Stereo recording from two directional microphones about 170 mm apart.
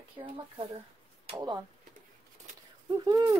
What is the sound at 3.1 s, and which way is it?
Speech, 20° right (ahead or behind).